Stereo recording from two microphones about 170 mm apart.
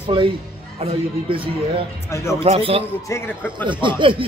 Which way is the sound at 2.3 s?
35° right (ahead or behind).